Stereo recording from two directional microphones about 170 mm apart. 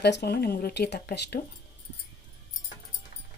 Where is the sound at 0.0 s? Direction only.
75° left (ahead or behind).